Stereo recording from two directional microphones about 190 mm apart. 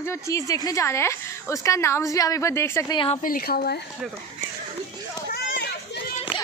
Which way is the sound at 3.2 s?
50° left (ahead or behind).